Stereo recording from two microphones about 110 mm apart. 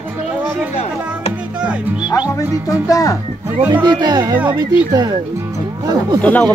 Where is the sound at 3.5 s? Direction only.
20° right (ahead or behind).